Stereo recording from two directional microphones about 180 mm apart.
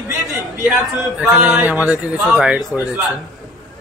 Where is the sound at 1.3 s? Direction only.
5° right (ahead or behind).